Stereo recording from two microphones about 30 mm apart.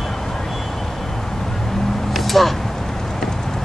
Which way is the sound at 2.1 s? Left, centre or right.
Centre.